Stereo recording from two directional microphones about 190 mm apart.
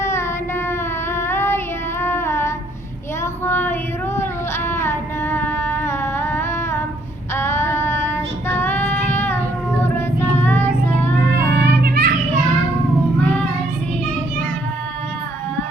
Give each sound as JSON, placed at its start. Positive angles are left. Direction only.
{"t": 0.0, "sound": "child singing", "side_deg": 15}
{"t": 1.1, "sound": "female singing", "side_deg": 10}
{"t": 3.4, "sound": "child singing", "side_deg": 10}
{"t": 4.2, "sound": "a sound", "side_deg": 10}
{"t": 7.3, "sound": "child singing", "side_deg": 15}
{"t": 11.5, "sound": "music", "side_deg": -60}